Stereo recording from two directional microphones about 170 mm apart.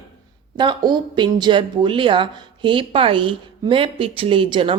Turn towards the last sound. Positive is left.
turn(degrees=-30)  # may be behind; listen again after turning